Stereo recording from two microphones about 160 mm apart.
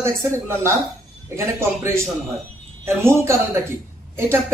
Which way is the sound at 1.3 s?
20° right (ahead or behind).